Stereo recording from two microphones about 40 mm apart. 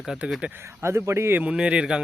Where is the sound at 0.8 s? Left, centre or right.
Right.